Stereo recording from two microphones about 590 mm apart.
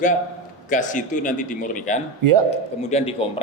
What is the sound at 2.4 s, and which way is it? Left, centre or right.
Speech, centre.